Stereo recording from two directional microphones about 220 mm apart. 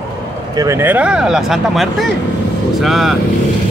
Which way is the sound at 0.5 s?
15° right (ahead or behind).